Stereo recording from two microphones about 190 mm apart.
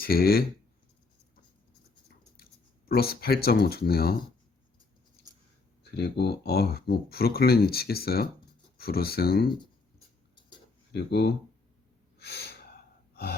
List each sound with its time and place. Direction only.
0.0 s speech: 50° left (ahead or behind)
2.9 s speech: 55° left (ahead or behind)
5.8 s speech: 60° left (ahead or behind)
10.9 s speech: 60° left (ahead or behind)
12.2 s gasp: 60° left (ahead or behind)